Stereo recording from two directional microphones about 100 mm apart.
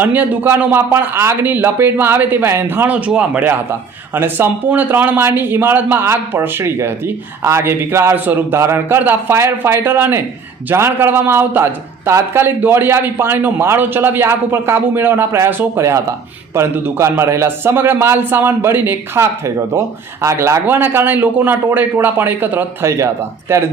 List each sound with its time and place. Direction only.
0.0 s a man's voice: 20° right (ahead or behind)